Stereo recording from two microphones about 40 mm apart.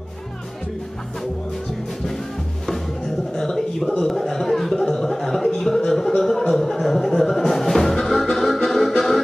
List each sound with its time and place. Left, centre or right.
3.3 s a sound: centre
3.8 s a man's voice: left
4.1 s speech: centre
6.5 s music: centre